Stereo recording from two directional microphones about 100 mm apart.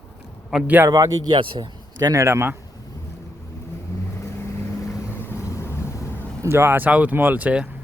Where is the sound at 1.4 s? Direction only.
55° right (ahead or behind).